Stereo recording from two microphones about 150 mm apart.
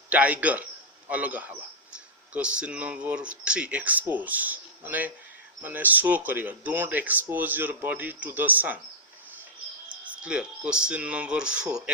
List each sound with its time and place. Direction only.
0.1 s a man's voice: 10° right (ahead or behind)
9.9 s speech: 10° right (ahead or behind)